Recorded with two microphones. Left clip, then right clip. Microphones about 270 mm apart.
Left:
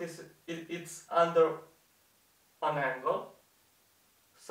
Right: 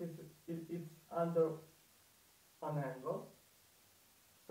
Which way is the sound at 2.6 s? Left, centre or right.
Centre.